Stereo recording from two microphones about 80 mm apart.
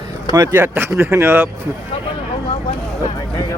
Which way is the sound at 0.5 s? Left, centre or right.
Right.